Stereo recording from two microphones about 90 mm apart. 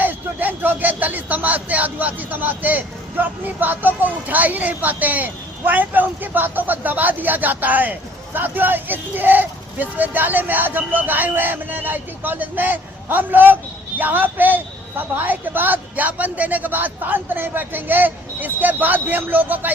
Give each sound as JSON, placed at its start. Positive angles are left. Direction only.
{"t": 0.0, "sound": "speech", "side_deg": -20}